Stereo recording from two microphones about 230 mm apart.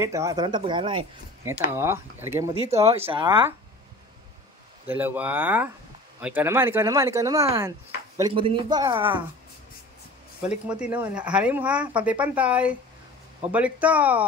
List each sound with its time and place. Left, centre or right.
0.0 s speech: centre
1.7 s speech: centre
4.8 s speech: centre
10.5 s speech: centre